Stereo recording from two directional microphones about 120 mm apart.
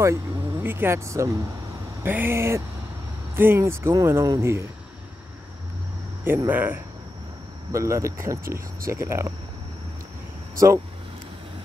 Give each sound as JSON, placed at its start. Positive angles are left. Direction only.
{"t": 0.0, "sound": "speech", "side_deg": -20}
{"t": 6.2, "sound": "speech", "side_deg": -20}
{"t": 7.7, "sound": "speech", "side_deg": -25}